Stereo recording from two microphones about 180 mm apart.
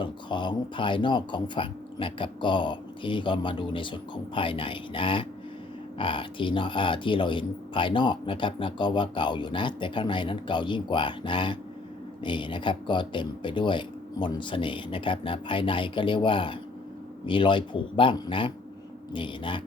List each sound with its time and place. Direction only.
0.0 s speech: 25° left (ahead or behind)